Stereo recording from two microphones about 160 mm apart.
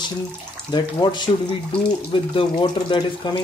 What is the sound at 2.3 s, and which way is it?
Speech, 30° left (ahead or behind).